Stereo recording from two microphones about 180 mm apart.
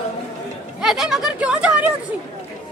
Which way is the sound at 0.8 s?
Centre (ahead or behind).